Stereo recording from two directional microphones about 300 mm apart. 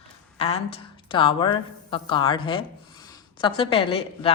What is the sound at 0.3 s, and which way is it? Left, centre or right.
A woman's voice, centre.